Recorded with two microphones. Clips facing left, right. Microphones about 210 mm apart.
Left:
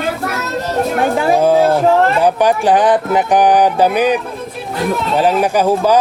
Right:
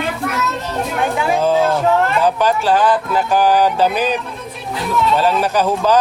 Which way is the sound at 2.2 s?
15° left (ahead or behind).